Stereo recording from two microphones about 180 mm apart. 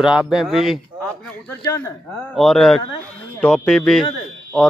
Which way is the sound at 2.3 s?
Centre (ahead or behind).